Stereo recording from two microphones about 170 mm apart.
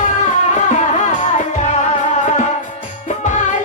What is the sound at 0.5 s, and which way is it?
Music, 45° left (ahead or behind).